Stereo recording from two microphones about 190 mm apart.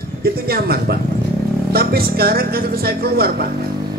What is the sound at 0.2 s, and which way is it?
A woman's voice, 55° right (ahead or behind).